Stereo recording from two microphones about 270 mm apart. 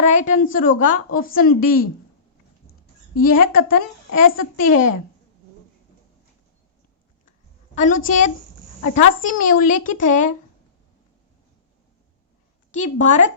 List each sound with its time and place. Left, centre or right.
0.0 s a woman's voice: left
3.2 s a woman's voice: left
7.8 s a woman's voice: left
12.7 s a woman's voice: left